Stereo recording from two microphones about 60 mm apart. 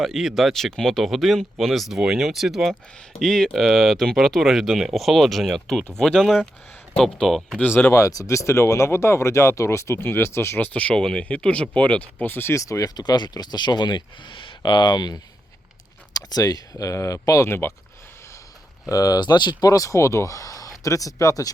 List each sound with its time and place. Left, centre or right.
0.0 s speech: centre
3.2 s speech: centre
6.2 s speech: centre
7.6 s speech: left
7.9 s speech: left
10.6 s speech: left
12.2 s speech: left
12.5 s speech: left
13.4 s speech: left
16.1 s speech: left
17.4 s speech: left
18.9 s speech: left
19.6 s speech: left